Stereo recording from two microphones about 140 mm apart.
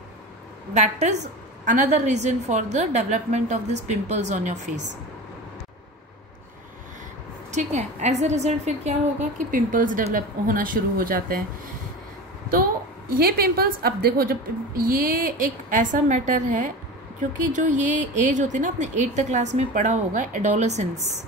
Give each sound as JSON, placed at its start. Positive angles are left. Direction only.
{"t": 0.7, "sound": "speech", "side_deg": -55}
{"t": 7.5, "sound": "a woman's voice", "side_deg": -55}
{"t": 9.5, "sound": "a woman's voice", "side_deg": -70}
{"t": 10.1, "sound": "speech", "side_deg": -80}
{"t": 13.2, "sound": "a woman's voice", "side_deg": -90}